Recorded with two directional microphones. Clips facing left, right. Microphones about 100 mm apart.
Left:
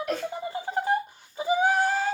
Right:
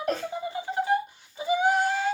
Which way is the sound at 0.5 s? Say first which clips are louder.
Right 1 dB; 40° left (ahead or behind).